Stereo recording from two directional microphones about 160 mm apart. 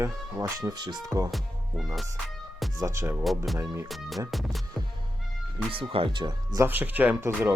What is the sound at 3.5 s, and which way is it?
Speech, 15° right (ahead or behind).